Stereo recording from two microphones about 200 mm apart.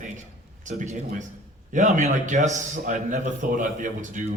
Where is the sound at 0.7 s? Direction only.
35° right (ahead or behind).